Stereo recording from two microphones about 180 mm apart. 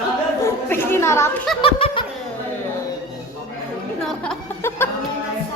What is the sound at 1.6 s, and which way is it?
Laughter, 30° left (ahead or behind).